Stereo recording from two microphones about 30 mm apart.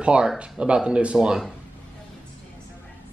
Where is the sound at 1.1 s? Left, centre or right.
Right.